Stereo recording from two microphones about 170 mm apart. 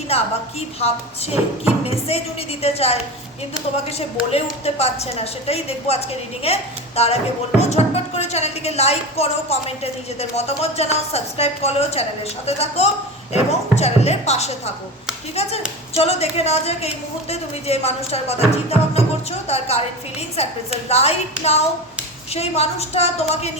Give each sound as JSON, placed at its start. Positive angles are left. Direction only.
{"t": 0.8, "sound": "speech", "side_deg": 35}
{"t": 22.3, "sound": "speech", "side_deg": 40}